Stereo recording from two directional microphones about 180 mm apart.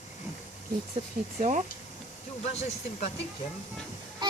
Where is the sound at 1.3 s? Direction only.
40° right (ahead or behind).